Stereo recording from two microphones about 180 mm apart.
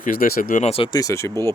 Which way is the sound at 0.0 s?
55° left (ahead or behind).